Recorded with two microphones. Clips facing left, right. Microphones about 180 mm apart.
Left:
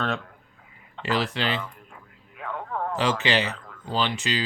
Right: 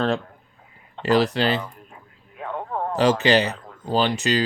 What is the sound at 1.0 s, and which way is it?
Speech, 40° right (ahead or behind).